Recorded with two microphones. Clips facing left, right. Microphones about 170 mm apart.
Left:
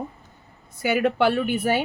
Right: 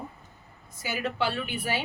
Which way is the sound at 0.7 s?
60° left (ahead or behind).